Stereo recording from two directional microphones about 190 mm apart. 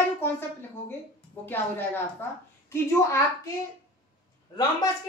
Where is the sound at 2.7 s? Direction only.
15° left (ahead or behind).